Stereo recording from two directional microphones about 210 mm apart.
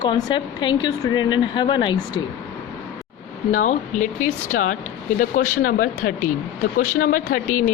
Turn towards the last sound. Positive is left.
turn(degrees=35)  # may be behind; listen again after turning